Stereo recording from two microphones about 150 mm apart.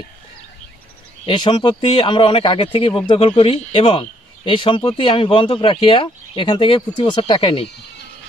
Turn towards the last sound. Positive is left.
turn(degrees=35)  # may be behind; listen again after turning